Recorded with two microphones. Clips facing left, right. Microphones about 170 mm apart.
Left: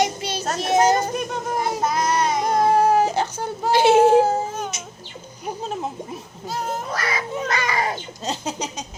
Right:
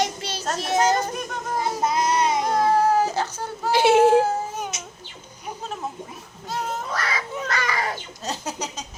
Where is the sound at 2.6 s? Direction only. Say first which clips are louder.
Left 3 dB; 20° left (ahead or behind).